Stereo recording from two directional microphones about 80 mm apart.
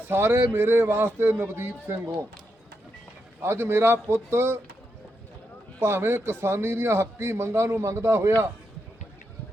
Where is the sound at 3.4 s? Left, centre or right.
Right.